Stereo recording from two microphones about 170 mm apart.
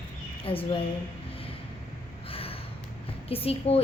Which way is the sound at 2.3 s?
35° left (ahead or behind).